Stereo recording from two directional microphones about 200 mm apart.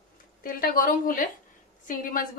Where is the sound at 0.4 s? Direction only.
45° left (ahead or behind).